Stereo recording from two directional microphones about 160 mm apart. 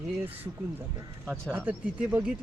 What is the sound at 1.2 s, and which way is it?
Speech, 5° left (ahead or behind).